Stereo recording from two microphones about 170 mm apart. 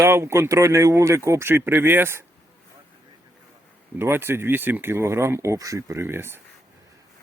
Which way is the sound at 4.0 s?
15° right (ahead or behind).